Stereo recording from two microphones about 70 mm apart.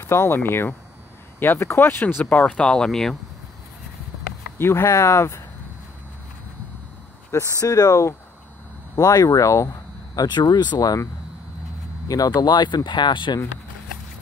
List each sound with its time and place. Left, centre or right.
0.0 s speech: left
2.4 s speech: centre
4.6 s speech: left
7.6 s speech: left
10.1 s speech: left
12.4 s speech: left